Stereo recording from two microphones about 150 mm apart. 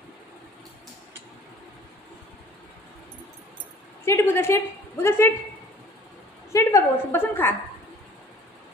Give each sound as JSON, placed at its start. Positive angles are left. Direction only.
{"t": 4.0, "sound": "a woman's voice", "side_deg": 15}
{"t": 6.5, "sound": "a woman's voice", "side_deg": 20}